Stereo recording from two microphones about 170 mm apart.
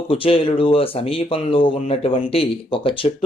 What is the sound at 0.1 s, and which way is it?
Speech, 30° left (ahead or behind).